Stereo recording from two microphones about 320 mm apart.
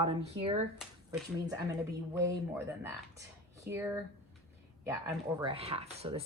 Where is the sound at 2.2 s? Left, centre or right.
Centre.